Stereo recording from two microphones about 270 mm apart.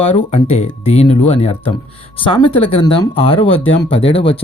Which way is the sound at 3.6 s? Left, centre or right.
Left.